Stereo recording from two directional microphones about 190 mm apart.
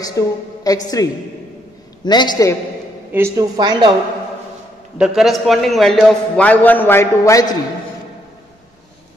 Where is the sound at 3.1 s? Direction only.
15° right (ahead or behind).